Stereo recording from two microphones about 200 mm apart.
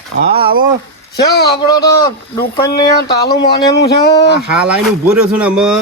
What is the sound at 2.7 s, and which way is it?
Speech, 55° left (ahead or behind).